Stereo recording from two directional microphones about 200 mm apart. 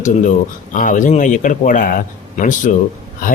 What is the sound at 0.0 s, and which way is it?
A man's voice, 40° left (ahead or behind).